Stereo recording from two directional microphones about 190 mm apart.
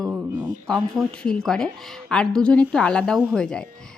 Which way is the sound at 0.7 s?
5° left (ahead or behind).